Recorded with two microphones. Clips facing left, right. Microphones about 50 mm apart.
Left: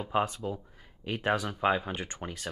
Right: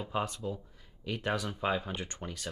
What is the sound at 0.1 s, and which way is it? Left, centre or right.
Speech, centre.